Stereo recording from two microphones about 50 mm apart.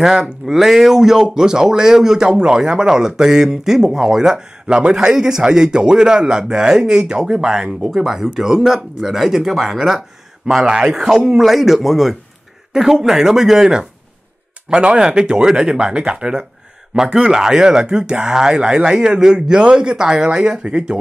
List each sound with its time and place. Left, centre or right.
0.0 s speech: centre
7.9 s speech: centre